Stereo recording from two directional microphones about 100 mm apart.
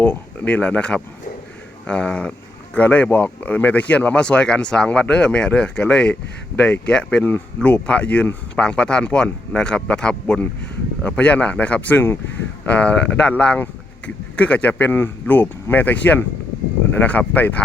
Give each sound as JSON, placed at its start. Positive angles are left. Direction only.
{"t": 0.0, "sound": "speech", "side_deg": 15}